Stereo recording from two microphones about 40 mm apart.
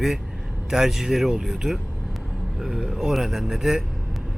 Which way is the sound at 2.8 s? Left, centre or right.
Centre.